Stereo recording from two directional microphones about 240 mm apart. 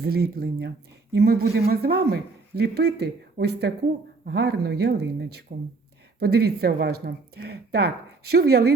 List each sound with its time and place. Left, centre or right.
0.0 s speech: right